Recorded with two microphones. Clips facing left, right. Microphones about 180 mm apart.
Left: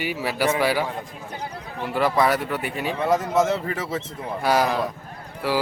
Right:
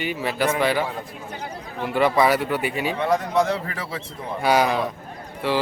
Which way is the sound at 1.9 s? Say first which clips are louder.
Right 2 dB; centre (ahead or behind).